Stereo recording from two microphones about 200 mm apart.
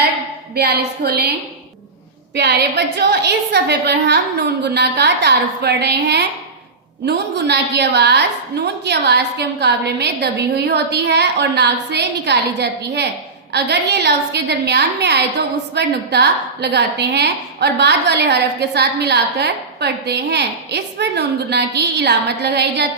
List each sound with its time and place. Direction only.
0.5 s a woman's voice: 50° right (ahead or behind)
2.3 s a woman's voice: 55° right (ahead or behind)